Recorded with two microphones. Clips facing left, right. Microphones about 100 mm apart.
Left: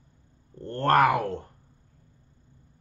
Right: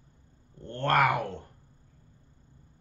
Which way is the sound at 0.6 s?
40° left (ahead or behind).